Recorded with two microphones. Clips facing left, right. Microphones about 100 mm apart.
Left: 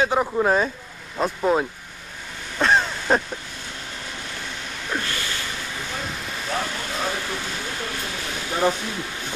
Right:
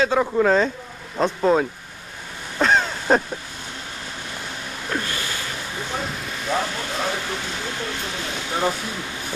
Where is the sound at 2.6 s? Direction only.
Centre (ahead or behind).